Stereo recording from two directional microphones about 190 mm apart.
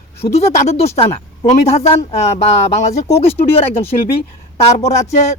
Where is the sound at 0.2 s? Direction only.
35° left (ahead or behind).